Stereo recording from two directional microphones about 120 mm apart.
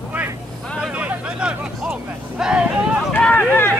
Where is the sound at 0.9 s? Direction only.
10° right (ahead or behind).